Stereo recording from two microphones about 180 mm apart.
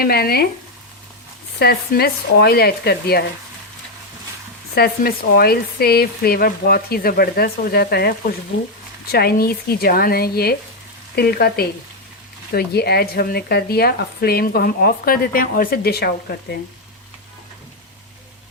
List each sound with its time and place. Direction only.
0.0 s speech: 60° left (ahead or behind)
1.5 s speech: 60° left (ahead or behind)
4.7 s speech: 60° left (ahead or behind)
9.1 s speech: 60° left (ahead or behind)